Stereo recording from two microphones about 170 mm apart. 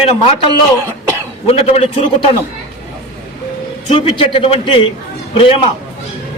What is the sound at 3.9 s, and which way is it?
A man's voice, 35° left (ahead or behind).